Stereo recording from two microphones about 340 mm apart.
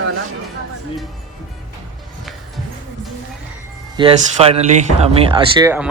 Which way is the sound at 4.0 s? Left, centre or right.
Centre.